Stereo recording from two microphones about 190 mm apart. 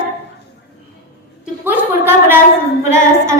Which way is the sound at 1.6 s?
10° right (ahead or behind).